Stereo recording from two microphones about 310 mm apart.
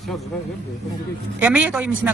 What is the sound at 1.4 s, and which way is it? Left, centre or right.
Speech, centre.